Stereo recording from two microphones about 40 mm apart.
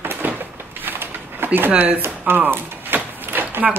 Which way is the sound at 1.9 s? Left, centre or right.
Right.